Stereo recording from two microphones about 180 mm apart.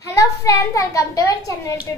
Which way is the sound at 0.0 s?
15° left (ahead or behind).